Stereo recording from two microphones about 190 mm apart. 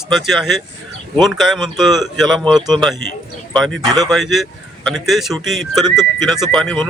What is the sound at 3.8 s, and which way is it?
Speech, 20° right (ahead or behind).